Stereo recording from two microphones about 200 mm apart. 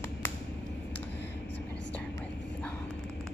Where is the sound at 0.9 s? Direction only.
60° left (ahead or behind).